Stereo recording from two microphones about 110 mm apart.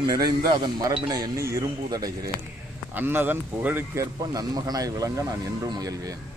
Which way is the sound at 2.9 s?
20° right (ahead or behind).